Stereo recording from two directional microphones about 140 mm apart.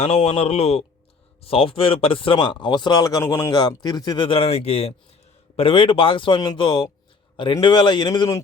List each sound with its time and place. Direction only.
0.0 s speech: 45° left (ahead or behind)